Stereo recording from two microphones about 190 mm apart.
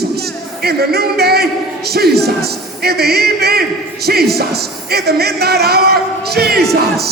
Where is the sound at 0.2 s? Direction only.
55° right (ahead or behind).